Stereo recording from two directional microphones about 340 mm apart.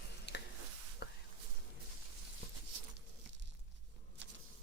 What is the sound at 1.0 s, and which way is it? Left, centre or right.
Whispering, left.